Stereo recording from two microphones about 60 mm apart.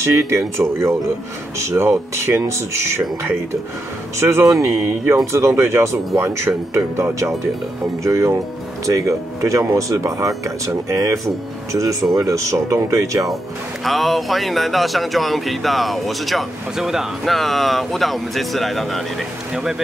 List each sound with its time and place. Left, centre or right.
0.0 s speech: right
4.2 s speech: right
4.7 s speech: right
13.8 s speech: centre